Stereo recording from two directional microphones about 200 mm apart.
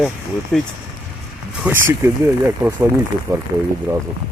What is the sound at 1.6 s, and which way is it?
Speech, 10° right (ahead or behind).